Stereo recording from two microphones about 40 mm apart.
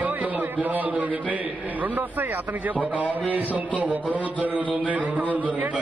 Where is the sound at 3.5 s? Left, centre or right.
Right.